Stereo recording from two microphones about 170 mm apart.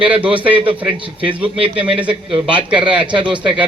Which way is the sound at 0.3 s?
10° right (ahead or behind).